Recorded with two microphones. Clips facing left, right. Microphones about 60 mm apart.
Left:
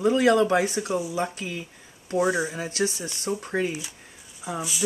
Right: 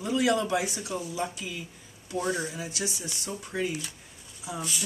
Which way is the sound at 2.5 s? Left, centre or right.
Left.